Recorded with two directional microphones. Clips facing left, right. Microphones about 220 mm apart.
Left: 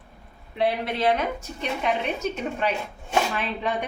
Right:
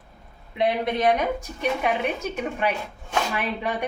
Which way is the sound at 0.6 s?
20° right (ahead or behind).